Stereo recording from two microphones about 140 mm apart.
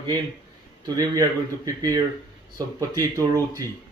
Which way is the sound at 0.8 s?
30° right (ahead or behind).